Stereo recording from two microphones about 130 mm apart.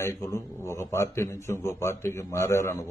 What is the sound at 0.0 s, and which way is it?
Speech, 20° left (ahead or behind).